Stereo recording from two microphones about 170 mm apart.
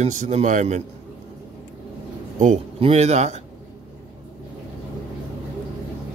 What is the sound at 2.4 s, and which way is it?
Speech, 40° right (ahead or behind).